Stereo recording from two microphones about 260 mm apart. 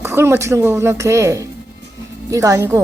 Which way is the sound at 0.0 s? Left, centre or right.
Centre.